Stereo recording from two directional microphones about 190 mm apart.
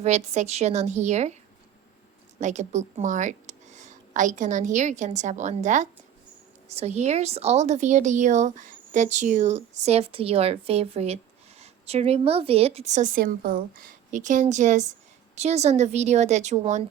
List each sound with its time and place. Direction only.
0.0 s a woman's voice: 35° right (ahead or behind)
2.4 s a woman's voice: 40° right (ahead or behind)